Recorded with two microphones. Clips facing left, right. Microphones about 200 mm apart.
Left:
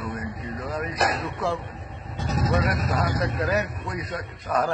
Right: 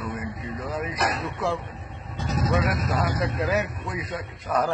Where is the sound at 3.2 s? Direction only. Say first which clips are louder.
Even; 15° right (ahead or behind).